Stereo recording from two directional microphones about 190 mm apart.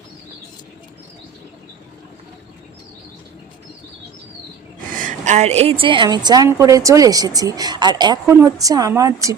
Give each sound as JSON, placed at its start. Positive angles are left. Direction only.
{"t": 4.9, "sound": "a woman's voice", "side_deg": -40}